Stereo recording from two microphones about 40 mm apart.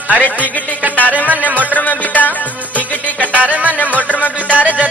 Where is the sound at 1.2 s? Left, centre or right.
Right.